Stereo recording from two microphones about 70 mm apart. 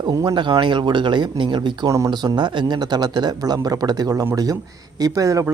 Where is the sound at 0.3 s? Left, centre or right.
Right.